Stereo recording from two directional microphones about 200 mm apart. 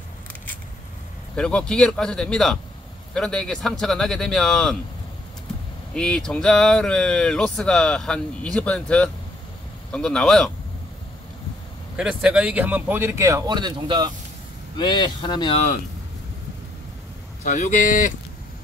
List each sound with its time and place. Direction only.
1.3 s speech: 5° left (ahead or behind)
5.9 s speech: centre (ahead or behind)
12.0 s speech: 5° right (ahead or behind); by 14.1 s 20° right (ahead or behind)
14.8 s speech: 20° left (ahead or behind)
17.4 s speech: 35° left (ahead or behind)